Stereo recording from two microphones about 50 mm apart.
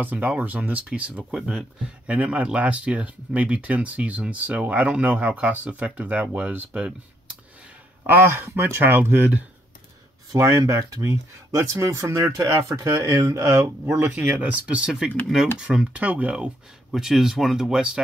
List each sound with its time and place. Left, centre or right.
0.0 s speech: right
8.1 s speech: right
8.5 s speech: right
8.8 s speech: right
10.3 s speech: right
14.1 s speech: right
14.8 s speech: centre
15.8 s speech: right
16.9 s speech: centre